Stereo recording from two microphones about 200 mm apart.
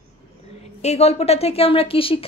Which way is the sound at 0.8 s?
35° left (ahead or behind).